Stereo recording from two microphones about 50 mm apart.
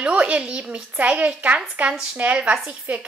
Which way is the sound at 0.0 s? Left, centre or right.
Right.